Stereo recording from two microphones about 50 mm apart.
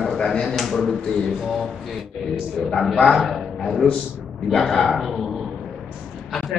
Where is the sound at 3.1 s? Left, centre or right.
Centre.